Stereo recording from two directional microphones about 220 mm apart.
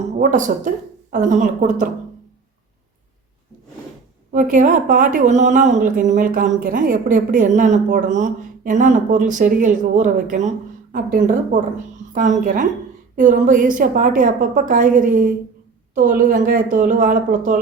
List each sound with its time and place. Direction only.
0.2 s speech: 35° right (ahead or behind)
4.3 s speech: 35° right (ahead or behind)
16.3 s speech: 35° right (ahead or behind)